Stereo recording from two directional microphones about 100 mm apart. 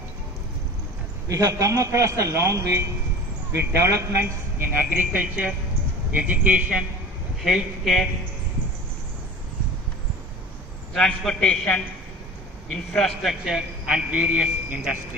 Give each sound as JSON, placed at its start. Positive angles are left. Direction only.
{"t": 1.3, "sound": "a man's voice", "side_deg": -30}
{"t": 3.8, "sound": "a woman's voice", "side_deg": -25}
{"t": 7.4, "sound": "a man's voice", "side_deg": -5}
{"t": 10.9, "sound": "a man's voice", "side_deg": 5}
{"t": 12.9, "sound": "a man's voice", "side_deg": 5}